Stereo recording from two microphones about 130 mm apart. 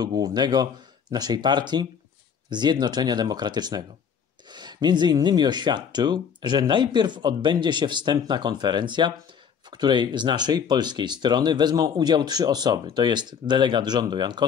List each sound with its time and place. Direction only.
0.0 s speech: 30° right (ahead or behind)